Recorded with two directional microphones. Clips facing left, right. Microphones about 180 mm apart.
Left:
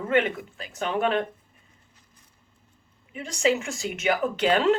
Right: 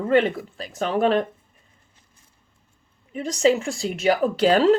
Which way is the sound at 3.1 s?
35° right (ahead or behind).